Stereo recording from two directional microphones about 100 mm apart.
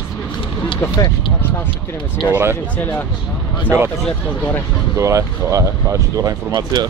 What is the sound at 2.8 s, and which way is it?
Speech, 15° left (ahead or behind).